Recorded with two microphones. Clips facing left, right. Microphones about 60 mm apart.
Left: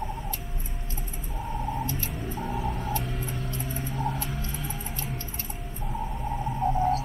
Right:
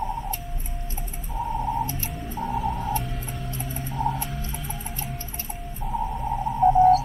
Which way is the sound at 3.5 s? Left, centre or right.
Centre.